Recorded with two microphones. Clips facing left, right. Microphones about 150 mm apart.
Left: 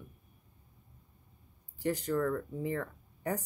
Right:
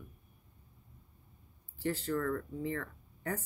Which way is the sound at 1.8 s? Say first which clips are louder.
Left 3 dB; 15° left (ahead or behind).